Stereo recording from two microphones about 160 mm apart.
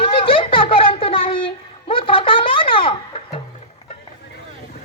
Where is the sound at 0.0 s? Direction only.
35° left (ahead or behind).